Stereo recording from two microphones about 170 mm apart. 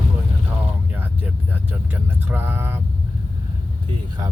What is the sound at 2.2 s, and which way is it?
Speech, 10° right (ahead or behind).